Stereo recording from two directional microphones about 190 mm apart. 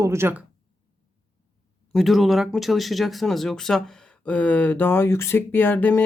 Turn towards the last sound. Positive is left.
turn(degrees=10)  # may be behind; listen again after turning